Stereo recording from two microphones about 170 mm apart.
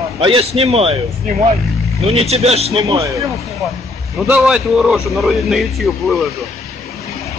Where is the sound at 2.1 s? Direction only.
35° right (ahead or behind).